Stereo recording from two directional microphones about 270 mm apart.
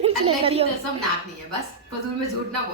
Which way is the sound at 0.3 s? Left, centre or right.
Right.